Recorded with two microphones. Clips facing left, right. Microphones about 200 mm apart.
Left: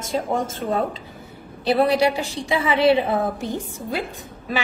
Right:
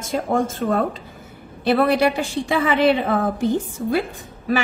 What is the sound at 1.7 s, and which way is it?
A woman's voice, 55° right (ahead or behind).